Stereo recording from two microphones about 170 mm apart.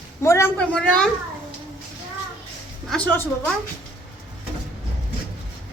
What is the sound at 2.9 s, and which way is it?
Speech, 5° left (ahead or behind).